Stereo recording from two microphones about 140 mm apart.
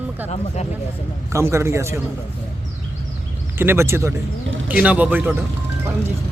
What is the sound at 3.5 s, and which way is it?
Speech, 15° right (ahead or behind).